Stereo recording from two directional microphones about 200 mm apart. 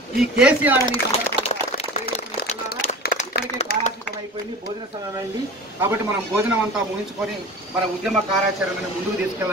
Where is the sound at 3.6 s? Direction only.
35° left (ahead or behind).